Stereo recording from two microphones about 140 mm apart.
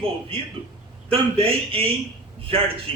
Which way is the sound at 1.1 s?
40° right (ahead or behind).